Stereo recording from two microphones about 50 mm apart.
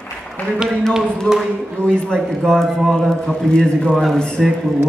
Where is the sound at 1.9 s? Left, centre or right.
Centre.